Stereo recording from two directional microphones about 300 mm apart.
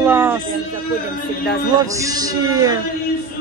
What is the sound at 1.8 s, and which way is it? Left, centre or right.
Speech, centre.